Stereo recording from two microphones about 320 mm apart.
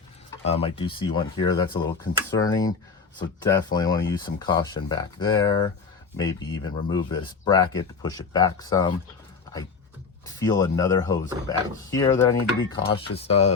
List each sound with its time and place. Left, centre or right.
0.4 s speech: centre
10.2 s speech: centre